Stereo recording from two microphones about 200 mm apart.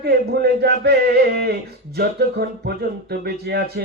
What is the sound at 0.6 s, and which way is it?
Speech, 55° right (ahead or behind).